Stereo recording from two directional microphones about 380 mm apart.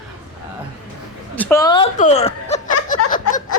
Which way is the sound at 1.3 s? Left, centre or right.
Centre.